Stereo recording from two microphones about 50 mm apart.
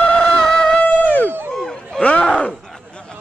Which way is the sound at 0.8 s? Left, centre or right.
Left.